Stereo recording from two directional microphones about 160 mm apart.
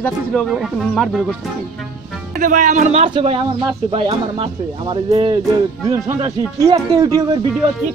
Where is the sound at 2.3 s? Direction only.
55° right (ahead or behind).